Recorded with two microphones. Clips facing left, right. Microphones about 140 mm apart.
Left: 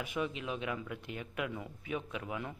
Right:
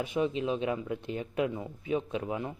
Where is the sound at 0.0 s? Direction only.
30° right (ahead or behind).